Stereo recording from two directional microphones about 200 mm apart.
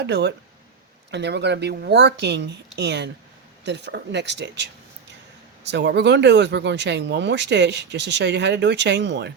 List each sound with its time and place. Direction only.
0.0 s speech: 55° right (ahead or behind)